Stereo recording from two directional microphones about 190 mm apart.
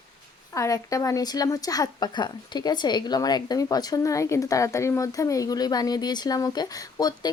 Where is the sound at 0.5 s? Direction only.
15° left (ahead or behind).